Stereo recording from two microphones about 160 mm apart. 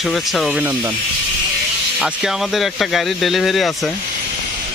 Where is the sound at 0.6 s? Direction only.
15° right (ahead or behind).